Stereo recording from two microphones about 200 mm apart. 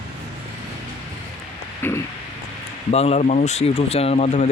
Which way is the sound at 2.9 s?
30° left (ahead or behind).